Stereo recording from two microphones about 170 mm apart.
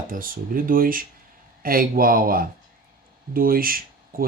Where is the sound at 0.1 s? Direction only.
55° right (ahead or behind).